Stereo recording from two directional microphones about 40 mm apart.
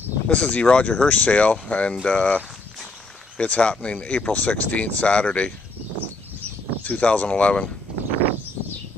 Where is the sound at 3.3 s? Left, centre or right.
Left.